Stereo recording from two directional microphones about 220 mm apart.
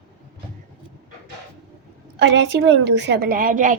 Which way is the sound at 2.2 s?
55° right (ahead or behind).